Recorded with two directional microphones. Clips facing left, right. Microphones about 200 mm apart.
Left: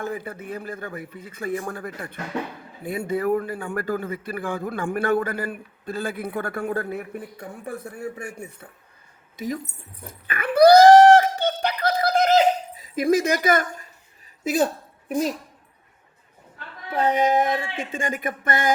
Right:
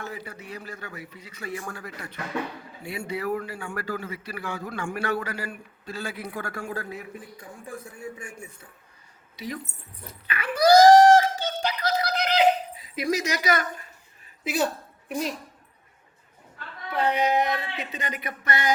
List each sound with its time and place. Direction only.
0.0 s a man's voice: 50° left (ahead or behind)
9.3 s speech: 45° left (ahead or behind)
10.1 s a sound: 50° left (ahead or behind)
16.9 s a man's voice: 45° left (ahead or behind)